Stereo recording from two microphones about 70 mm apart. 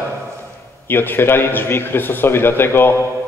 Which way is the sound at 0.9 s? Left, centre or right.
Left.